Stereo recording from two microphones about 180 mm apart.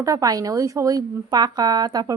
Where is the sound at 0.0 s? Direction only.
20° right (ahead or behind).